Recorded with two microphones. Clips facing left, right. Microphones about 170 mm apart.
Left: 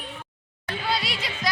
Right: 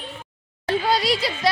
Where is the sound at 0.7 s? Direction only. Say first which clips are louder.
Right 8 dB; 40° right (ahead or behind).